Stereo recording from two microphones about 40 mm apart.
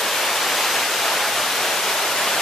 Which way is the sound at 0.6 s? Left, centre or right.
Centre.